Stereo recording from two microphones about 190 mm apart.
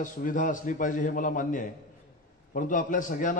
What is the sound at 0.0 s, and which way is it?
A man's voice, 45° left (ahead or behind).